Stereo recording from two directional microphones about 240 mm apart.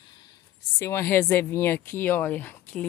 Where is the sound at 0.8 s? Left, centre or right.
Centre.